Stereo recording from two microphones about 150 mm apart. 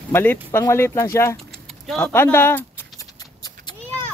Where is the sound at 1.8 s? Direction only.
5° left (ahead or behind).